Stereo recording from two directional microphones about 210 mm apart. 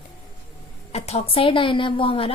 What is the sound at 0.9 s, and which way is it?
A woman's voice, 30° left (ahead or behind).